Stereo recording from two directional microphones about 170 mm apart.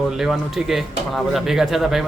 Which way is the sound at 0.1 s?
5° right (ahead or behind).